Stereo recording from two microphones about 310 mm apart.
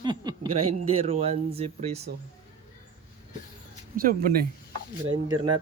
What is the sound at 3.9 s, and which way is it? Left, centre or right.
Speech, right.